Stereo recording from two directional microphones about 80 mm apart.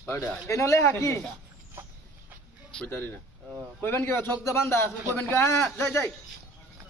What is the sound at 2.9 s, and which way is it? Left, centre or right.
A man's voice, left.